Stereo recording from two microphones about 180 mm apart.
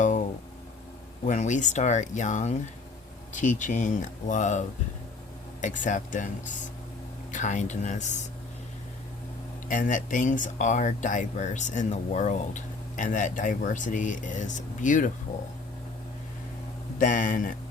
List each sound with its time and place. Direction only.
1.2 s speech: 40° left (ahead or behind)
5.6 s speech: 45° left (ahead or behind)
9.6 s speech: 45° left (ahead or behind)
17.0 s speech: 45° left (ahead or behind)